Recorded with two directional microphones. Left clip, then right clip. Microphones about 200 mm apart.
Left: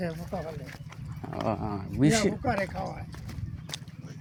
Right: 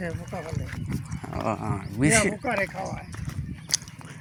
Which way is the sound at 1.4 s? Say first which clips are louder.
Right 2 dB; 5° left (ahead or behind).